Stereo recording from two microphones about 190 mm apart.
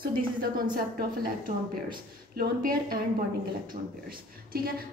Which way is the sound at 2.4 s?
50° right (ahead or behind).